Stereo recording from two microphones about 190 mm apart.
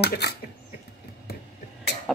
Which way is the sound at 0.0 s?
60° left (ahead or behind).